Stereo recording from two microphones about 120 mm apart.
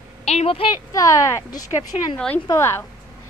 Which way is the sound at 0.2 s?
65° left (ahead or behind).